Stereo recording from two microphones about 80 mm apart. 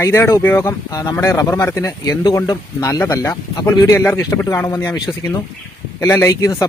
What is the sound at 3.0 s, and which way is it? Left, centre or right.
Speech, left.